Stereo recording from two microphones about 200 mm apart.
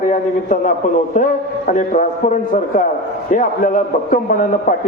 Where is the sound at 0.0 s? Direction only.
40° left (ahead or behind).